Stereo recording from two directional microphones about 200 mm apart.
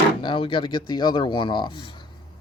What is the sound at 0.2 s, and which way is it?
Speech, 25° left (ahead or behind).